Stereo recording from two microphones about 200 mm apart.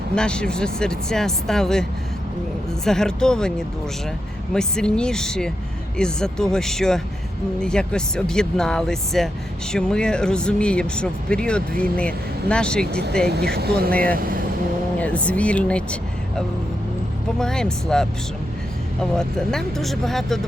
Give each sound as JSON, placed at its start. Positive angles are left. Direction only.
{"t": 0.2, "sound": "speech", "side_deg": 5}
{"t": 4.5, "sound": "speech", "side_deg": 5}
{"t": 12.9, "sound": "speech", "side_deg": -55}
{"t": 13.9, "sound": "speech", "side_deg": 5}
{"t": 17.4, "sound": "speech", "side_deg": 5}
{"t": 19.1, "sound": "speech", "side_deg": 5}